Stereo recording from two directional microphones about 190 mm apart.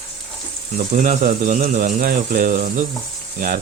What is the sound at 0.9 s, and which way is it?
Speech, 45° right (ahead or behind).